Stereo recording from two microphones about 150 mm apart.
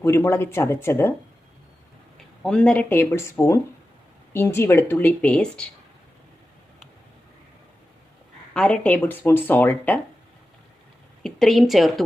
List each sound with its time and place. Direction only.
0.0 s speech: 20° left (ahead or behind)
2.4 s speech: 5° left (ahead or behind)
8.5 s speech: 5° left (ahead or behind)
11.2 s speech: centre (ahead or behind)